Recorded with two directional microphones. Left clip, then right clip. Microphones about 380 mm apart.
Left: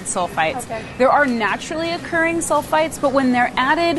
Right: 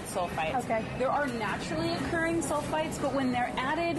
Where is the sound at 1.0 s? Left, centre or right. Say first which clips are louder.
Left 18 dB; left.